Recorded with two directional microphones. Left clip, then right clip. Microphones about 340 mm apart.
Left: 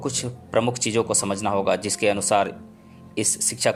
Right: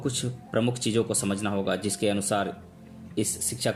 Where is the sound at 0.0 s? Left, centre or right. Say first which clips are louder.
Left 3 dB; centre.